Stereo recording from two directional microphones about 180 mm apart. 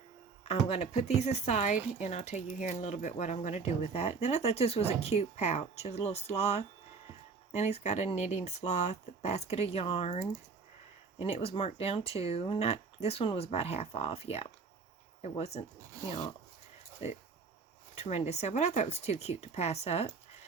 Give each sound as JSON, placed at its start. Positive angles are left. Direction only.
{"t": 0.4, "sound": "speech", "side_deg": 35}
{"t": 17.0, "sound": "speech", "side_deg": 35}